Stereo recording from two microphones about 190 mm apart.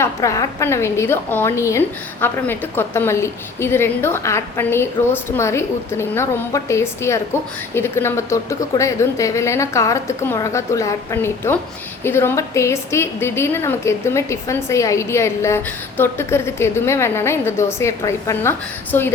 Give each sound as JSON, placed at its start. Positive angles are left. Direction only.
{"t": 0.0, "sound": "a woman's voice", "side_deg": 15}